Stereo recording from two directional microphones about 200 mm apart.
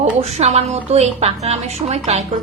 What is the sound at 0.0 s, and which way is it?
A woman's voice, 35° right (ahead or behind).